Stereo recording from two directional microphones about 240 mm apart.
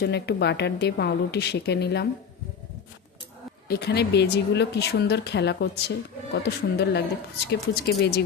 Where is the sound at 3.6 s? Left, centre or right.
Left.